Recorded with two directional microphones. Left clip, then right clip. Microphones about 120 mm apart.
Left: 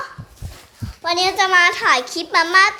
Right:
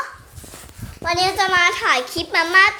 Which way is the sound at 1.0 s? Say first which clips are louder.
Left 1 dB; 20° left (ahead or behind).